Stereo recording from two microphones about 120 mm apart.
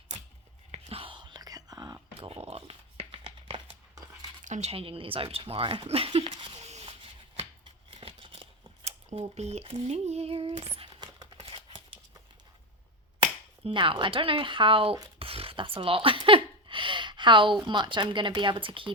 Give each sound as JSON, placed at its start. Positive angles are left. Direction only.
{"t": 0.7, "sound": "whispering", "side_deg": -55}
{"t": 4.4, "sound": "speech", "side_deg": -90}
{"t": 4.7, "sound": "speech", "side_deg": -50}
{"t": 7.3, "sound": "scissors", "side_deg": -50}
{"t": 9.1, "sound": "a sound", "side_deg": -60}
{"t": 13.7, "sound": "speech", "side_deg": -45}
{"t": 15.2, "sound": "a sound", "side_deg": -50}
{"t": 17.7, "sound": "speech", "side_deg": -40}